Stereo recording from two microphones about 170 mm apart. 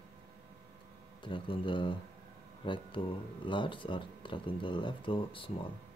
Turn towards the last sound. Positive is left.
turn(degrees=30)  # may be behind; listen again after turning